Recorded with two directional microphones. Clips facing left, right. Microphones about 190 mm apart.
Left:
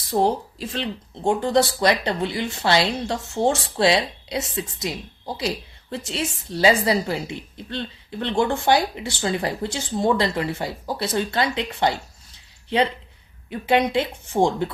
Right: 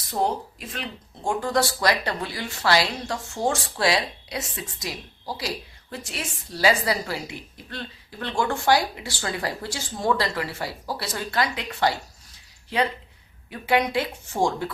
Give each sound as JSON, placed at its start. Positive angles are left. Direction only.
{"t": 0.1, "sound": "speech", "side_deg": 30}
{"t": 13.5, "sound": "speech", "side_deg": 25}